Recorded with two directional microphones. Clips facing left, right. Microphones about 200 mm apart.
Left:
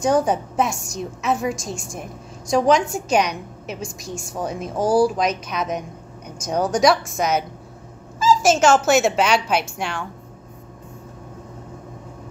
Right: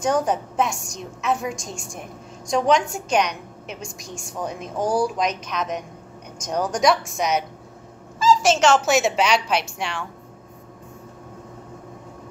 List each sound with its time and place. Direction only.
0.0 s a woman's voice: 5° left (ahead or behind)
8.5 s a woman's voice: 5° left (ahead or behind)